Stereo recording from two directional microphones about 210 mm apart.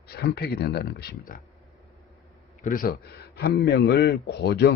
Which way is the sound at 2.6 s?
40° left (ahead or behind).